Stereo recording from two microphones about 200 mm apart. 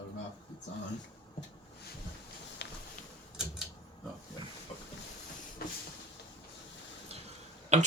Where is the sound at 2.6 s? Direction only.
60° left (ahead or behind).